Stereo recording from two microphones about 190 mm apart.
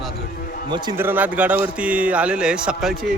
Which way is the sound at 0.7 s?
25° right (ahead or behind).